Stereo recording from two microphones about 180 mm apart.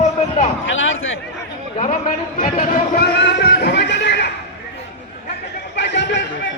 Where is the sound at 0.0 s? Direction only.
40° left (ahead or behind).